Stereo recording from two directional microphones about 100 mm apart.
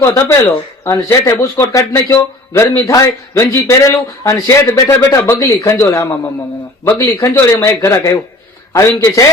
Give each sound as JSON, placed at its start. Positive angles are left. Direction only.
{"t": 0.0, "sound": "a man's voice", "side_deg": 25}
{"t": 0.4, "sound": "a man's voice", "side_deg": 35}